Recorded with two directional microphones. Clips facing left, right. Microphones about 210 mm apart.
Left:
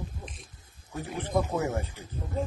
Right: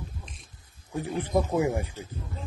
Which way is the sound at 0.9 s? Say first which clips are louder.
Right 3 dB; 15° right (ahead or behind).